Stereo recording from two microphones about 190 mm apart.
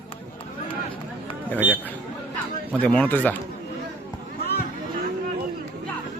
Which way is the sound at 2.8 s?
5° left (ahead or behind).